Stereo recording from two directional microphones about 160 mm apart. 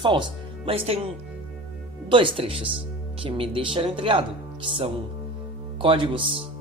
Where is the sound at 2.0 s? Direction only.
30° right (ahead or behind).